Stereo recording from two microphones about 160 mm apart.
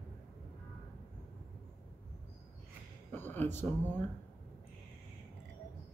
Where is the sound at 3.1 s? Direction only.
10° left (ahead or behind).